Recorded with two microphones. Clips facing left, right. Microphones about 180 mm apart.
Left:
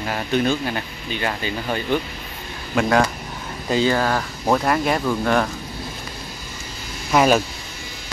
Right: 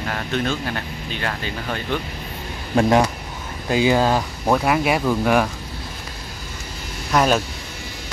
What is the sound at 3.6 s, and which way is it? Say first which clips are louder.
Speech: right 2 dB; 10° right (ahead or behind).